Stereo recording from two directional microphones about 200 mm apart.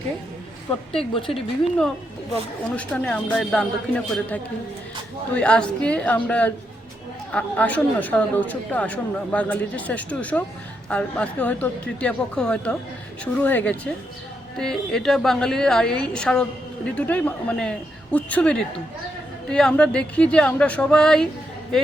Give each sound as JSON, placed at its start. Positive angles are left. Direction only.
{"t": 2.7, "sound": "a woman's voice", "side_deg": 5}